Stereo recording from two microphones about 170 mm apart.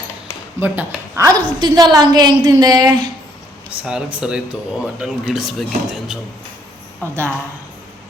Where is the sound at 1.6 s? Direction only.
25° right (ahead or behind).